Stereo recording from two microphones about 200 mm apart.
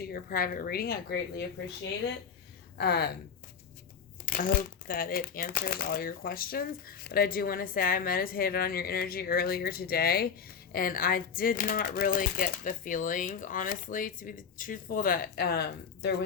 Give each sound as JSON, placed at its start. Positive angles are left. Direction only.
{"t": 0.0, "sound": "speech", "side_deg": 50}
{"t": 2.7, "sound": "speech", "side_deg": 55}
{"t": 4.3, "sound": "speech", "side_deg": 45}